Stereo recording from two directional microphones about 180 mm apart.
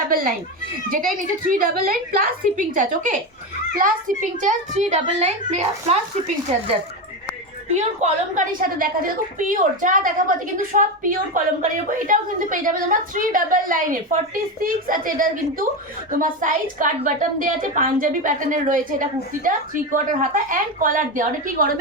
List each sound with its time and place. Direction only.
0.9 s a woman's voice: 50° right (ahead or behind)
7.7 s a woman's voice: 40° right (ahead or behind)